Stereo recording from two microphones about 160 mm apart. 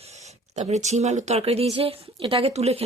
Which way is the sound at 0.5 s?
45° right (ahead or behind).